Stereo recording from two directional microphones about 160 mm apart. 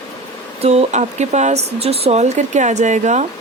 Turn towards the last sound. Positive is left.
turn(degrees=-50)  # may be behind; listen again after turning